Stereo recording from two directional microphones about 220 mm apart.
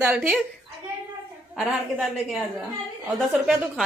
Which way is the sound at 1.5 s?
Centre (ahead or behind).